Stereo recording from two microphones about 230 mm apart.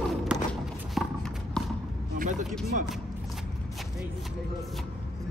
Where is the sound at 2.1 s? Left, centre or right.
Right.